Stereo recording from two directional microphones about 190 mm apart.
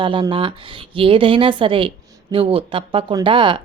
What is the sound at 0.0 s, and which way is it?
A woman's voice, 25° right (ahead or behind).